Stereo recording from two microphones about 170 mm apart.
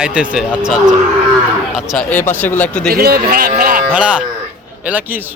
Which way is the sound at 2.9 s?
60° right (ahead or behind).